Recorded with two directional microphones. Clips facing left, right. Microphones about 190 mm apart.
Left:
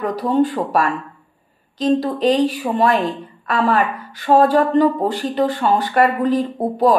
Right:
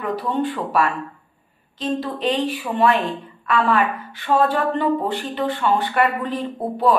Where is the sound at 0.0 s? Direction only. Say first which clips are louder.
Left 5 dB; 40° left (ahead or behind).